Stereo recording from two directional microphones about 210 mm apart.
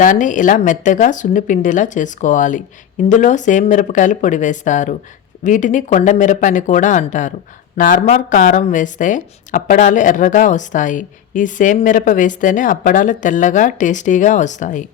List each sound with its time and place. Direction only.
0.0 s speech: 40° left (ahead or behind)